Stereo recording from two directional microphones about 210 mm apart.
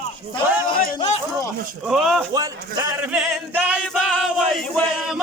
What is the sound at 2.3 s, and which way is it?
Speech, 15° right (ahead or behind).